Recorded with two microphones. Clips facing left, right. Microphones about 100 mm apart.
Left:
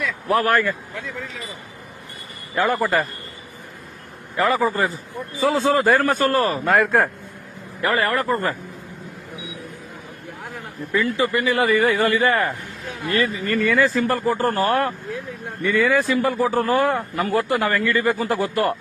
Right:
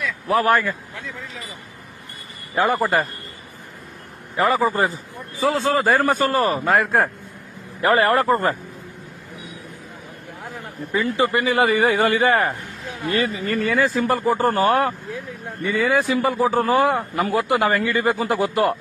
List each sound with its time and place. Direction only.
0.3 s a man's voice: 5° right (ahead or behind)
2.6 s a man's voice: 10° right (ahead or behind)
4.4 s a man's voice: centre (ahead or behind)
4.6 s a man's voice: 20° right (ahead or behind)
5.4 s a man's voice: centre (ahead or behind)
7.8 s a man's voice: 30° right (ahead or behind)
11.0 s a man's voice: 25° right (ahead or behind)
13.7 s a man's voice: 10° right (ahead or behind)